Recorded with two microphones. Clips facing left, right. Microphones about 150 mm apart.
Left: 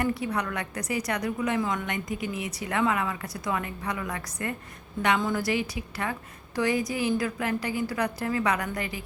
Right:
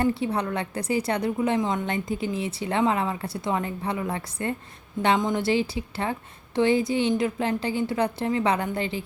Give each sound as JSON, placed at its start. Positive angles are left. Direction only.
{"t": 0.0, "sound": "a woman's voice", "side_deg": -30}